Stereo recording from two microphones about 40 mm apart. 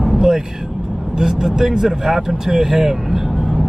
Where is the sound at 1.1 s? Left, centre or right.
Centre.